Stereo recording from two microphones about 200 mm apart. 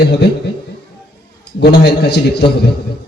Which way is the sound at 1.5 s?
55° left (ahead or behind).